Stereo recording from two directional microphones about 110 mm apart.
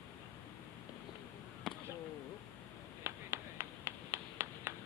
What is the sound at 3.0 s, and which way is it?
Clapping, 20° right (ahead or behind).